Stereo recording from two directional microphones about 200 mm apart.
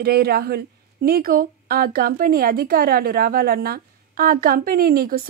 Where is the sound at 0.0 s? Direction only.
50° right (ahead or behind).